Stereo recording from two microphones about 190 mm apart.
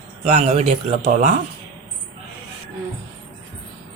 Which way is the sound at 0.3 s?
35° right (ahead or behind).